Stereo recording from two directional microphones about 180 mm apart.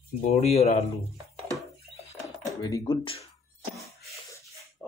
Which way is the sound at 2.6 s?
20° left (ahead or behind).